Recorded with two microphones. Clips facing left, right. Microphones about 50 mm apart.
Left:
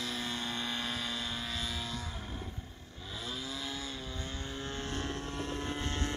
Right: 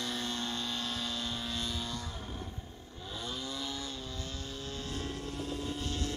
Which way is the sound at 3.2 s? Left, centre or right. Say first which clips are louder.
Right 1 dB; centre.